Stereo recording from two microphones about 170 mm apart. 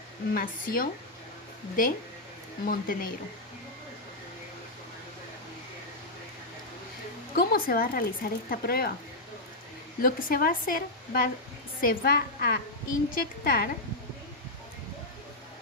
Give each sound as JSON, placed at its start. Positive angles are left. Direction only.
{"t": 0.3, "sound": "speech", "side_deg": 55}
{"t": 7.3, "sound": "speech", "side_deg": 60}
{"t": 10.0, "sound": "speech", "side_deg": 55}